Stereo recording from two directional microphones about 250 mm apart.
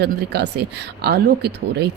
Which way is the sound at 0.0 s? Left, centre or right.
Right.